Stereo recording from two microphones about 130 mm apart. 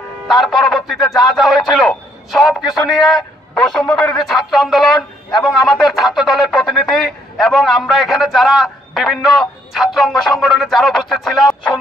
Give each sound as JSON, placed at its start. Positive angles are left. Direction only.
{"t": 0.3, "sound": "speech", "side_deg": 0}